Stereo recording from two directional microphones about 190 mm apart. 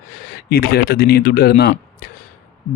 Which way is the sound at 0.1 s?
55° left (ahead or behind).